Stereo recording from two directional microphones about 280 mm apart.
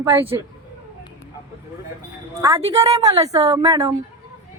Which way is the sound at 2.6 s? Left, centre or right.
Centre.